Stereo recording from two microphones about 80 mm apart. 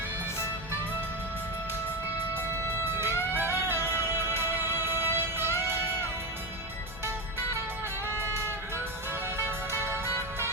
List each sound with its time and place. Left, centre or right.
3.0 s music: right
9.4 s music: right